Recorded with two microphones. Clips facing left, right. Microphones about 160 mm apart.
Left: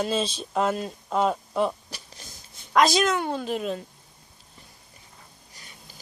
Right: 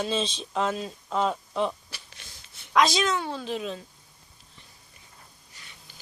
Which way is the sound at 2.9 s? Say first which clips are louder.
Left 3 dB; 50° left (ahead or behind).